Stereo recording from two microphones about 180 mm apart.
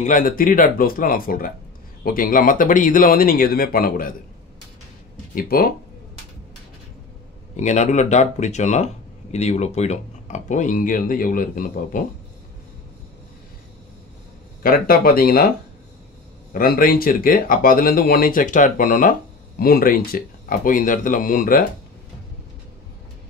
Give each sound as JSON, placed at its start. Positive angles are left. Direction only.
{"t": 0.0, "sound": "speech", "side_deg": 50}
{"t": 5.3, "sound": "speech", "side_deg": 55}
{"t": 7.5, "sound": "speech", "side_deg": 40}
{"t": 14.6, "sound": "speech", "side_deg": 55}
{"t": 16.5, "sound": "speech", "side_deg": 50}